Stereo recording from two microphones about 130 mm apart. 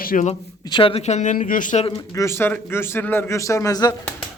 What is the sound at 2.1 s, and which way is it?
A man's voice, 20° left (ahead or behind).